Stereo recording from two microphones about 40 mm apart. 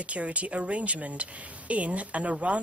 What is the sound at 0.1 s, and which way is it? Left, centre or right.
Speech, right.